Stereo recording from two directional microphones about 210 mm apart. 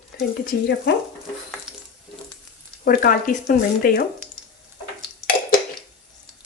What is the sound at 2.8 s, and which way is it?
Speech, 40° left (ahead or behind).